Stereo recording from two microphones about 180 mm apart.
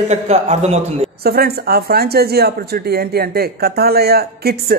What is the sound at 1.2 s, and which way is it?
Speech, 60° right (ahead or behind).